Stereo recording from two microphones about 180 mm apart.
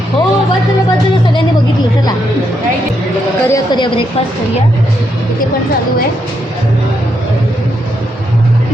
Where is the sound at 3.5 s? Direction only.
25° left (ahead or behind).